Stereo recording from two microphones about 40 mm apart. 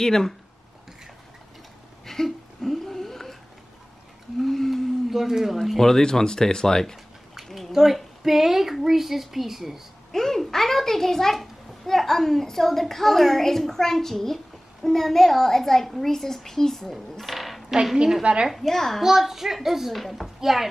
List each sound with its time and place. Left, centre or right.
0.0 s speech: centre
2.0 s a sound: centre
4.4 s humming: centre
5.1 s a child's voice: centre
5.8 s speech: centre
7.4 s a sound: centre
7.7 s speech: centre
10.1 s a child's voice: centre
18.2 s a woman's voice: right
18.6 s speech: centre
19.0 s a child's voice: centre